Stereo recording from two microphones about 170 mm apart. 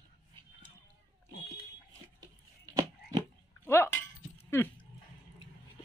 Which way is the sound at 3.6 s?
15° left (ahead or behind).